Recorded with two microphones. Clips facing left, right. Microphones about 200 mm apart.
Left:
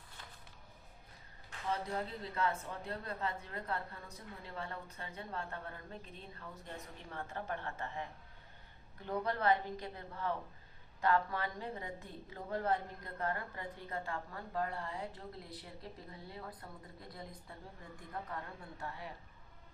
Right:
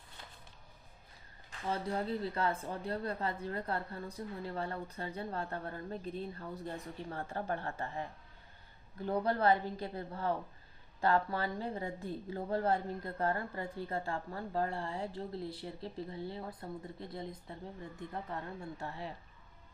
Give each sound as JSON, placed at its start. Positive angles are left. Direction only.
{"t": 2.3, "sound": "a woman's voice", "side_deg": -35}